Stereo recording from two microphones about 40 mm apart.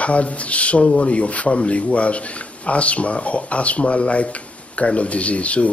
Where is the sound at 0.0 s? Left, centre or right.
Left.